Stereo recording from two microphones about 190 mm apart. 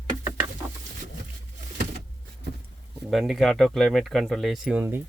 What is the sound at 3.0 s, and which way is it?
Speech, centre (ahead or behind).